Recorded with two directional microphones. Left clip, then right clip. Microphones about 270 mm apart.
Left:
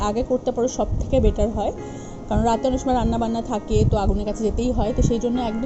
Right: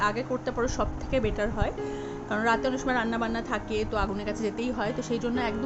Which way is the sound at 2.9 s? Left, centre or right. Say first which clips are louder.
Left 6 dB; centre.